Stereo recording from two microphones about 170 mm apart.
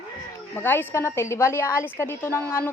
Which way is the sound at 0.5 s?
10° left (ahead or behind).